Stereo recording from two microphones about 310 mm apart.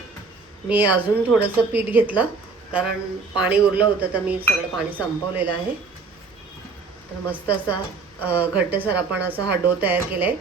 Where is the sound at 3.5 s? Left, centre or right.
Centre.